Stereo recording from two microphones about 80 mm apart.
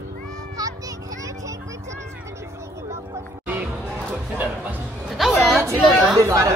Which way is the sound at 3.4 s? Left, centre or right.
Right.